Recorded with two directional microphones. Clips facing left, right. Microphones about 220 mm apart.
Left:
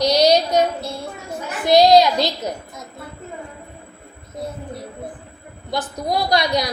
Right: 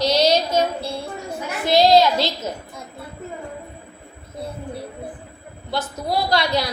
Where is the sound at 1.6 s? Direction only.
15° left (ahead or behind).